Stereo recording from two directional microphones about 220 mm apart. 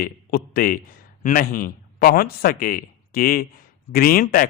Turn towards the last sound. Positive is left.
turn(degrees=40)  # may be behind; listen again after turning